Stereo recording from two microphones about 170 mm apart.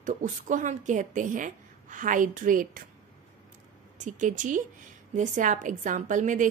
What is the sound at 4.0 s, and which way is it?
A woman's voice, 50° right (ahead or behind).